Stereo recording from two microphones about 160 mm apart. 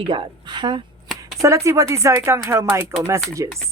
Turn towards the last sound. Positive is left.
turn(degrees=-20)  # may be behind; listen again after turning